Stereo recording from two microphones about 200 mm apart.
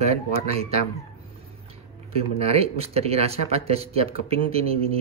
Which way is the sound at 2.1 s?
30° right (ahead or behind).